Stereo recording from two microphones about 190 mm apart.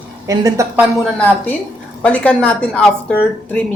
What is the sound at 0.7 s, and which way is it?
A woman's voice, 5° left (ahead or behind).